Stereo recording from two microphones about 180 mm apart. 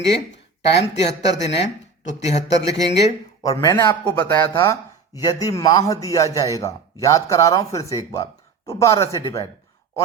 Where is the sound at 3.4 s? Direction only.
20° left (ahead or behind).